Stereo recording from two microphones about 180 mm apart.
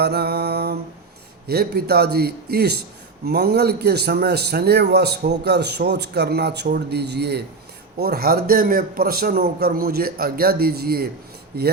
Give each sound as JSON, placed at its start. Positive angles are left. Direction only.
{"t": 0.0, "sound": "mantra", "side_deg": -60}
{"t": 1.5, "sound": "a man's voice", "side_deg": -60}